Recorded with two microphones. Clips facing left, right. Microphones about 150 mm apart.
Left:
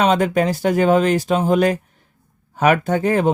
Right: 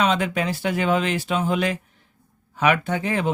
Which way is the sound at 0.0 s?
40° left (ahead or behind).